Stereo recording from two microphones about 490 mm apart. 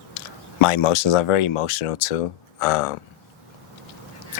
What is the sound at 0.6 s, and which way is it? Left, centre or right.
Speech, left.